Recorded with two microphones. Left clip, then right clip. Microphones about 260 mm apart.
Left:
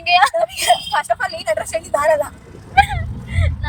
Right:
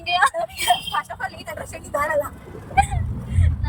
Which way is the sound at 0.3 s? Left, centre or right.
Left.